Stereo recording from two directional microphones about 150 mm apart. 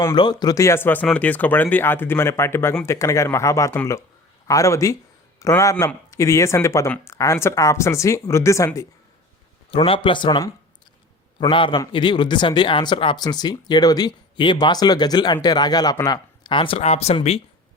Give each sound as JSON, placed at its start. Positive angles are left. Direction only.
{"t": 0.2, "sound": "a man's voice", "side_deg": 30}
{"t": 9.7, "sound": "speech", "side_deg": 35}